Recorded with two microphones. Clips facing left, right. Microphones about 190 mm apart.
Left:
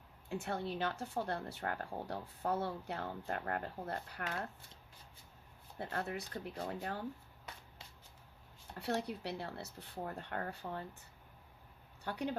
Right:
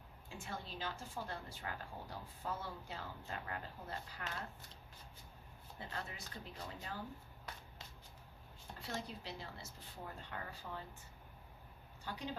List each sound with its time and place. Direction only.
0.3 s speech: 65° left (ahead or behind)
5.7 s speech: 60° left (ahead or behind)
8.8 s speech: 65° left (ahead or behind)
12.0 s speech: 60° left (ahead or behind)